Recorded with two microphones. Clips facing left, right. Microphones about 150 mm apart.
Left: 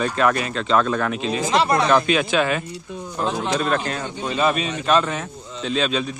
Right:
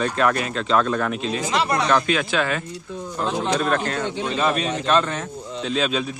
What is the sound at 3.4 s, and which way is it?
Speech, 5° left (ahead or behind).